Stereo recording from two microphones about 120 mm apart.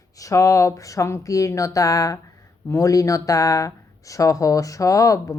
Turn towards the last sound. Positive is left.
turn(degrees=25)  # may be behind; listen again after turning